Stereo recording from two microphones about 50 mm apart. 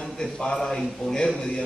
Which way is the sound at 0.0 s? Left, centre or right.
Centre.